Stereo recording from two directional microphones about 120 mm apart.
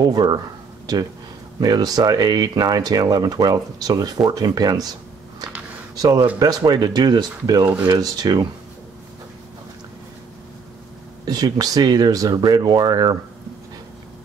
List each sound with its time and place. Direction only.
0.0 s speech: 35° right (ahead or behind)
1.6 s speech: 35° right (ahead or behind)
5.9 s speech: 30° right (ahead or behind)
11.2 s speech: 35° right (ahead or behind)